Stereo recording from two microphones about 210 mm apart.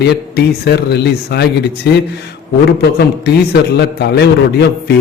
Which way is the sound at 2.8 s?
50° left (ahead or behind).